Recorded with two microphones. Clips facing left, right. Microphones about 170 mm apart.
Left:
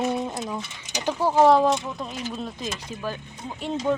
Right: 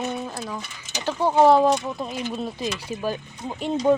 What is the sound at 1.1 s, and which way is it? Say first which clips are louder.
Speech: right 1 dB; centre (ahead or behind).